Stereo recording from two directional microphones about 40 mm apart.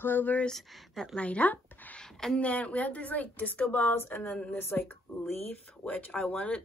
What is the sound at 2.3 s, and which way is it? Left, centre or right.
Speech, left.